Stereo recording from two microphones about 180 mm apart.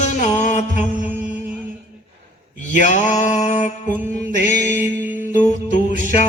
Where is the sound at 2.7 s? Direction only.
40° left (ahead or behind).